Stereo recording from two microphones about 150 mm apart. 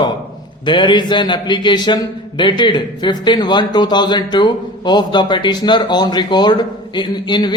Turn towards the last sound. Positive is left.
turn(degrees=30)  # may be behind; listen again after turning